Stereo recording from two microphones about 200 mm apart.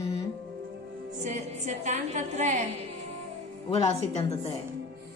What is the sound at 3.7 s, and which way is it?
Speech, 30° left (ahead or behind).